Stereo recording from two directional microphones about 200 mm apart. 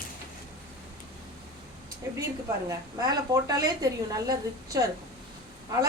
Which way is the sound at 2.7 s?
20° right (ahead or behind).